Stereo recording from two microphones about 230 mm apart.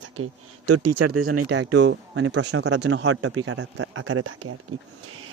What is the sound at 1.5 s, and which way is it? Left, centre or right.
Speech, right.